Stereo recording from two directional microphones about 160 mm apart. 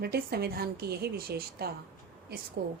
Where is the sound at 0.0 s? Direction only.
85° right.